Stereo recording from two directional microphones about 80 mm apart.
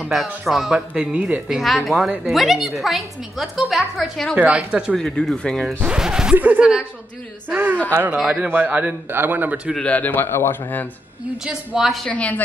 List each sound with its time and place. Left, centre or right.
0.5 s speech: centre
1.6 s a woman's voice: centre
4.4 s speech: centre
4.9 s speech: centre
5.8 s speech: centre
6.3 s a man's voice: centre
9.8 s a man's voice: centre
11.4 s speech: centre
12.1 s a man's voice: centre